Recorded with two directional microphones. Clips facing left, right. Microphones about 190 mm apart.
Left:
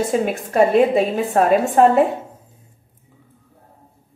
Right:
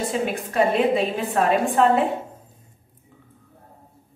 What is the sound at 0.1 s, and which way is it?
A woman's voice, 45° left (ahead or behind).